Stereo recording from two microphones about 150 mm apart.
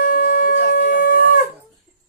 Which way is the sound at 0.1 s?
70° left (ahead or behind).